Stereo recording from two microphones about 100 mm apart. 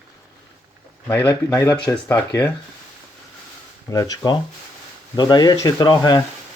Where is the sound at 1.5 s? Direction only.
35° left (ahead or behind).